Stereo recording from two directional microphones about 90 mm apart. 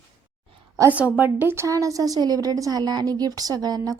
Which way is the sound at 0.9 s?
15° right (ahead or behind).